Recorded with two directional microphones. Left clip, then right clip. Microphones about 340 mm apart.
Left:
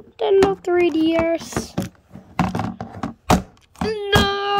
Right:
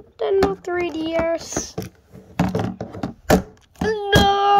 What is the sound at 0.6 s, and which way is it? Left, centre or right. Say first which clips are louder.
Speech: left 6 dB; centre.